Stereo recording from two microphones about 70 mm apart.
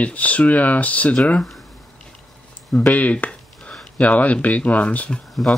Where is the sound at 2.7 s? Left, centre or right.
Left.